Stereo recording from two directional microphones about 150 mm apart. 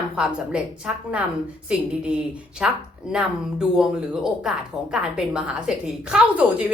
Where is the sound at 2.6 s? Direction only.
5° right (ahead or behind).